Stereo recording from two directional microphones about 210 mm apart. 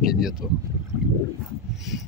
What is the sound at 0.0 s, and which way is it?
Speech, centre (ahead or behind).